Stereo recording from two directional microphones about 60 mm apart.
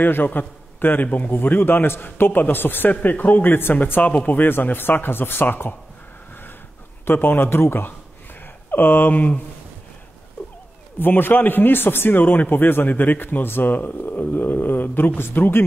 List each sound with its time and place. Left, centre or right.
0.0 s a man's voice: left
1.3 s a man's voice: left
7.1 s a man's voice: left
11.0 s a man's voice: left